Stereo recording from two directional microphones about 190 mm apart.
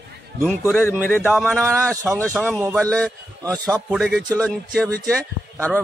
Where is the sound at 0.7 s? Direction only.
10° left (ahead or behind).